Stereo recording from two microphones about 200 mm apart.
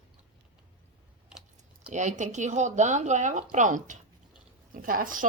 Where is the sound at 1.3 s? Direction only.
5° right (ahead or behind).